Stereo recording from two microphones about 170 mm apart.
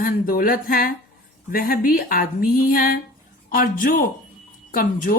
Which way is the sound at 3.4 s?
50° left (ahead or behind).